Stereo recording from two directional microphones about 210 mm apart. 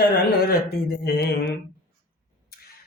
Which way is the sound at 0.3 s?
50° left (ahead or behind).